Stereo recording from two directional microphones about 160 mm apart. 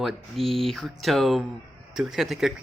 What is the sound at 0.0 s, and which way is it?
A man's voice, centre (ahead or behind).